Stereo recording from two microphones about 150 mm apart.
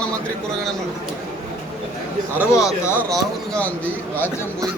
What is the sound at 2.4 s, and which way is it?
Speech, 20° left (ahead or behind).